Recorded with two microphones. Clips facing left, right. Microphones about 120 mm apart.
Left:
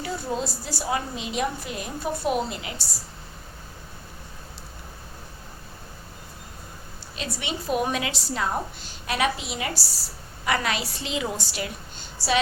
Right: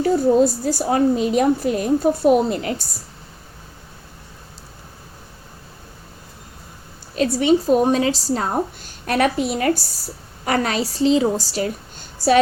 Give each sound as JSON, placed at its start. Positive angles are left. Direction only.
{"t": 0.0, "sound": "a woman's voice", "side_deg": -45}
{"t": 7.2, "sound": "a woman's voice", "side_deg": -40}